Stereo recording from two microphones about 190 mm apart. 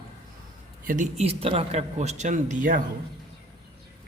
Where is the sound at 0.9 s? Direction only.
40° right (ahead or behind).